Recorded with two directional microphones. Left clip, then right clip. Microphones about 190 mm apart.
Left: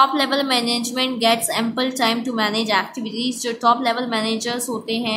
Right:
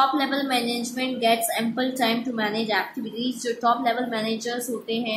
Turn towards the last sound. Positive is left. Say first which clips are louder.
# left 4 dB
turn(degrees=10)  # may be behind; listen again after turning